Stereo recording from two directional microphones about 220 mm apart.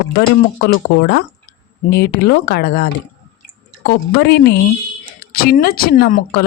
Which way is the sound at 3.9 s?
50° left (ahead or behind).